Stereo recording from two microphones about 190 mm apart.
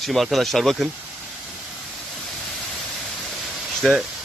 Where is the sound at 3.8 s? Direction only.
Centre (ahead or behind).